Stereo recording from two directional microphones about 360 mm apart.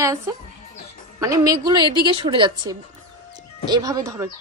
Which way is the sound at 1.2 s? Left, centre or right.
Centre.